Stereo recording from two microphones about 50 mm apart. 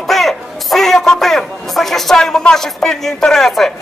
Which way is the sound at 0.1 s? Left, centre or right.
Centre.